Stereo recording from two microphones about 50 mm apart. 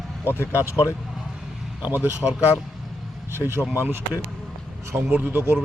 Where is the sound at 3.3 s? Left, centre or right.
Right.